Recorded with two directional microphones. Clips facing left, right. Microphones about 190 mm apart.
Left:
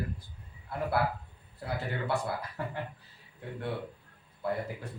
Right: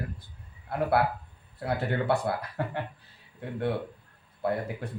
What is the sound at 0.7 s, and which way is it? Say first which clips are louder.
Speech: right 5 dB; 60° right (ahead or behind).